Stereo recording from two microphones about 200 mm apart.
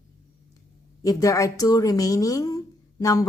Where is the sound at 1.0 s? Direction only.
15° left (ahead or behind).